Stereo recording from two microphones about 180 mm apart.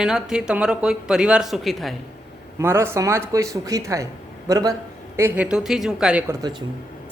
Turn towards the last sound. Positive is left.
turn(degrees=-20)  # may be behind; listen again after turning